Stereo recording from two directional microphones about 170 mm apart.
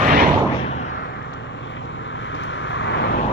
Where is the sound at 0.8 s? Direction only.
90° left.